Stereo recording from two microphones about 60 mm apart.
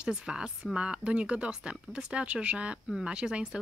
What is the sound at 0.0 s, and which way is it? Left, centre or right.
A woman's voice, centre.